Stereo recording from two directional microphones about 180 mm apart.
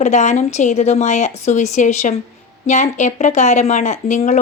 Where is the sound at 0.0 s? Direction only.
40° left (ahead or behind).